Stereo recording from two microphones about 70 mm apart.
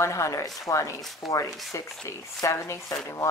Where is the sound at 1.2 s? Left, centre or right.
Centre.